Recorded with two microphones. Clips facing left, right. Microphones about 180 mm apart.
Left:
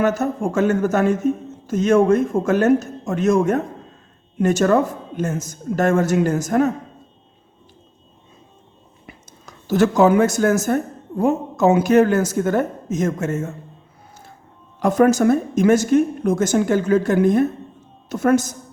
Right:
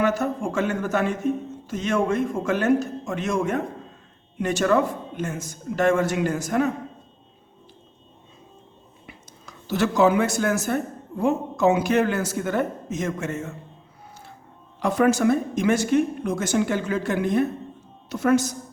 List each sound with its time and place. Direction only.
0.0 s a man's voice: 45° left (ahead or behind)
9.0 s a man's voice: 45° left (ahead or behind)
14.8 s a man's voice: 45° left (ahead or behind)